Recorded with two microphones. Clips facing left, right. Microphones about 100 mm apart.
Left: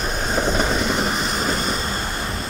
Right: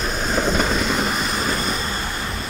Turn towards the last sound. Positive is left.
turn(degrees=25)  # may be behind; listen again after turning